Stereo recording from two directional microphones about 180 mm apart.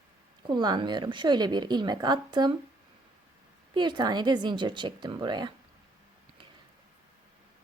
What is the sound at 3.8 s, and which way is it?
A woman's voice, 25° right (ahead or behind).